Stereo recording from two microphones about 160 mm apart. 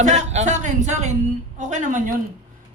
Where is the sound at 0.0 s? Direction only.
45° right (ahead or behind).